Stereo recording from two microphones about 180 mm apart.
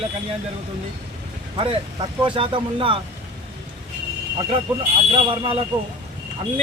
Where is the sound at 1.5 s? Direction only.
30° right (ahead or behind).